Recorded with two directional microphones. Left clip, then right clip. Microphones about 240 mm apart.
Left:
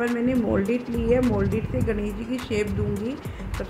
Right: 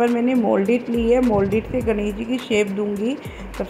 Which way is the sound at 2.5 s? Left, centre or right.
Centre.